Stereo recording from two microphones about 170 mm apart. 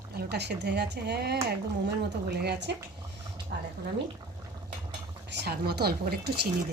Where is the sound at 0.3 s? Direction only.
80° right.